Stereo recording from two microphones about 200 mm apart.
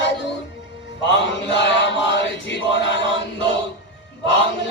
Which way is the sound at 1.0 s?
65° left (ahead or behind).